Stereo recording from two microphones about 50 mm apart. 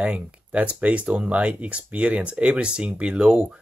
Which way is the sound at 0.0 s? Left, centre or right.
Right.